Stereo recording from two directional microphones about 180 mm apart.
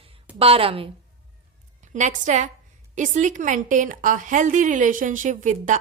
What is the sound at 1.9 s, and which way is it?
A woman's voice, 40° right (ahead or behind).